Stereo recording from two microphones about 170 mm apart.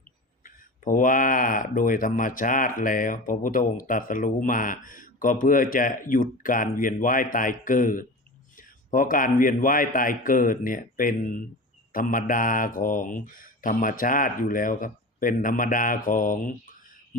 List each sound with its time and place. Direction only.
0.4 s speech: 50° left (ahead or behind)